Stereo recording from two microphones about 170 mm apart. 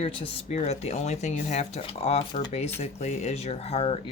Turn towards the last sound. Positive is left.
turn(degrees=35)  # may be behind; listen again after turning